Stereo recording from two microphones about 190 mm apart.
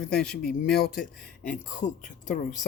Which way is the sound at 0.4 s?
55° left (ahead or behind).